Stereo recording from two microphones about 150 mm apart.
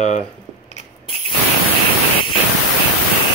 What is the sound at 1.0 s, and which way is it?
Spray, 35° left (ahead or behind).